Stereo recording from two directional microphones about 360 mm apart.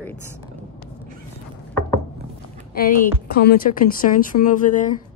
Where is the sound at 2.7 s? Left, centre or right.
Left.